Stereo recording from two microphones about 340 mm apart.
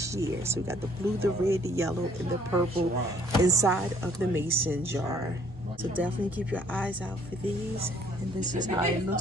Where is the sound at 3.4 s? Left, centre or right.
Centre.